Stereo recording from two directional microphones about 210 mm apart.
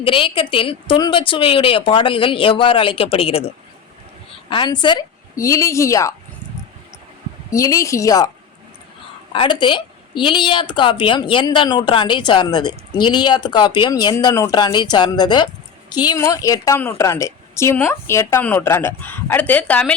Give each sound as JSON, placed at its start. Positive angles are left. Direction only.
{"t": 0.0, "sound": "a woman's voice", "side_deg": 25}
{"t": 7.5, "sound": "a woman's voice", "side_deg": 15}
{"t": 9.3, "sound": "a woman's voice", "side_deg": 25}